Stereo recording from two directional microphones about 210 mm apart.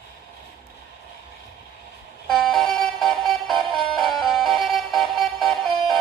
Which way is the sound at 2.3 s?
Centre (ahead or behind).